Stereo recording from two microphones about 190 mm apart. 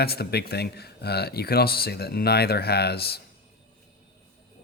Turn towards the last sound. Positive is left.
turn(degrees=55)  # may be behind; listen again after turning